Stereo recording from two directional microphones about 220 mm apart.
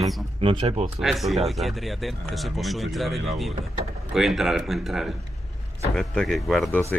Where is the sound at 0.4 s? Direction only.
25° right (ahead or behind).